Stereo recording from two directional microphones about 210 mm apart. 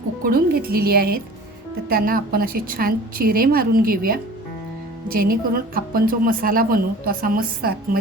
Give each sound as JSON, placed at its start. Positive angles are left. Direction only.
{"t": 0.3, "sound": "a woman's voice", "side_deg": -45}